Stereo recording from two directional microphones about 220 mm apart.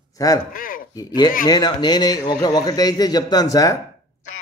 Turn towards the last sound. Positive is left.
turn(degrees=15)  # may be behind; listen again after turning